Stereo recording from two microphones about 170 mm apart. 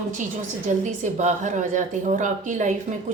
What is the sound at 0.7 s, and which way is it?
A woman's voice, 45° right (ahead or behind).